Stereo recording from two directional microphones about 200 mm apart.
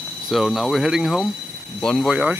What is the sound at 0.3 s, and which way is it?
Speech, centre (ahead or behind).